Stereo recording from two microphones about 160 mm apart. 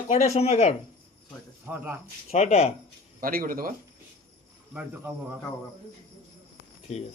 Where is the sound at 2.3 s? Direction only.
45° left (ahead or behind).